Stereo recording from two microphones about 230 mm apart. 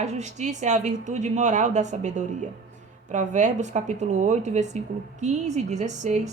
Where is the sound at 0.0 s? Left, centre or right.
Right.